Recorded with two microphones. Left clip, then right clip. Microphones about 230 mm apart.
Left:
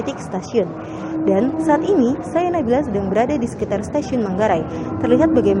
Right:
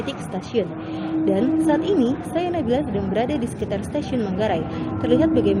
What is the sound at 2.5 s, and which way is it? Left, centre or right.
Speech, centre.